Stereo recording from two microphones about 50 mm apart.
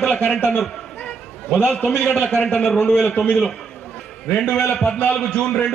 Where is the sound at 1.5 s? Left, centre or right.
Left.